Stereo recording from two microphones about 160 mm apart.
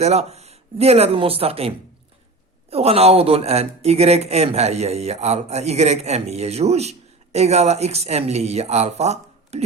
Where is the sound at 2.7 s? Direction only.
40° right (ahead or behind).